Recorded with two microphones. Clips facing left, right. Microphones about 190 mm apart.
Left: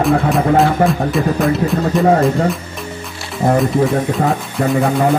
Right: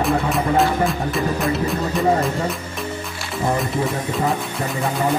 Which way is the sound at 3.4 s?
50° left (ahead or behind).